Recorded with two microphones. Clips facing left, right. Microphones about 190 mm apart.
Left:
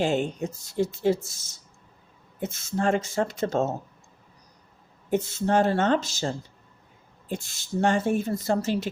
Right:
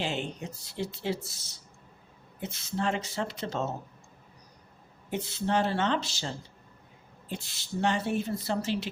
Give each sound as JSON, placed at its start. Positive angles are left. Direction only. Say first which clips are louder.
{"t": 0.0, "sound": "speech", "louder": "left 8 dB", "side_deg": 45}
{"t": 5.1, "sound": "speech", "louder": "left 6 dB", "side_deg": 45}